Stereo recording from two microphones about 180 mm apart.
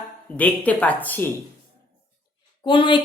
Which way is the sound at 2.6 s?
25° left (ahead or behind).